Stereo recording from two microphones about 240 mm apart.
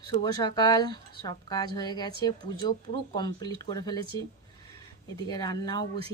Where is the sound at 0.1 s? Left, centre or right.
Centre.